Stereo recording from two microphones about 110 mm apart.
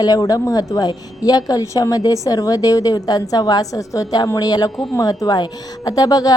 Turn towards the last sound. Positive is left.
turn(degrees=35)  # may be behind; listen again after turning